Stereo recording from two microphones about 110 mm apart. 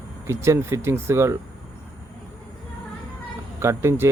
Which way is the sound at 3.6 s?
25° right (ahead or behind).